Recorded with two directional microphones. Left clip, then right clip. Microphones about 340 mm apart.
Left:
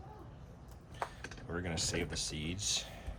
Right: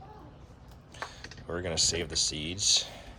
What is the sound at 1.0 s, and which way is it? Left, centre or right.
Speech, centre.